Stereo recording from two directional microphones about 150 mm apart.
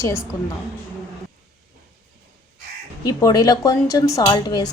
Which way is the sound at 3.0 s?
25° left (ahead or behind).